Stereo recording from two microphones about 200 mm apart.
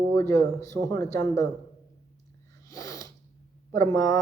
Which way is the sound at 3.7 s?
15° left (ahead or behind).